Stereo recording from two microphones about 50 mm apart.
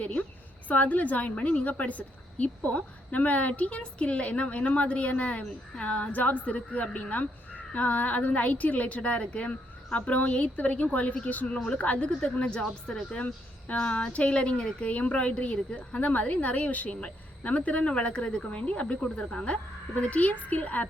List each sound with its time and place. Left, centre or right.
0.0 s a sound: left
0.7 s a woman's voice: left; by 13.2 s centre
13.2 s a woman's voice: left
20.0 s a woman's voice: left